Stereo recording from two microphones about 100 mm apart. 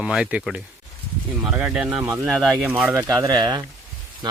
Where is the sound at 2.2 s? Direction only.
5° left (ahead or behind).